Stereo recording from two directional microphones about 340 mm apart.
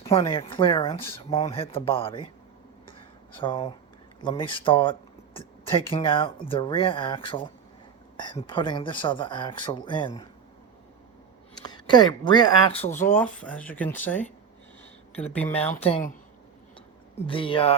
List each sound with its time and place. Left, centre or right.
0.0 s speech: centre
3.3 s speech: centre
11.5 s speech: centre
13.1 s speech: centre
15.3 s speech: centre
15.5 s speech: centre
17.2 s speech: centre